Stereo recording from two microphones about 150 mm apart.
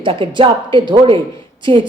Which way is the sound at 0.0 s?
35° right (ahead or behind).